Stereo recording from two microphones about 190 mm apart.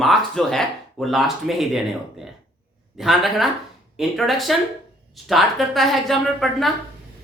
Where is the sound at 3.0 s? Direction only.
Centre (ahead or behind).